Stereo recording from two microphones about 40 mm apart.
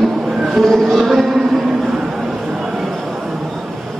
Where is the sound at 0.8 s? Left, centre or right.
Centre.